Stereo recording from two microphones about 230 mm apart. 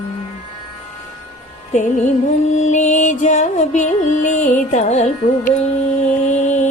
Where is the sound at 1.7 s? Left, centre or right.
Left.